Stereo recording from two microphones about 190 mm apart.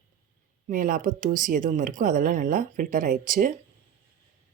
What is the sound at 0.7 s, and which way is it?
Speech, 45° right (ahead or behind).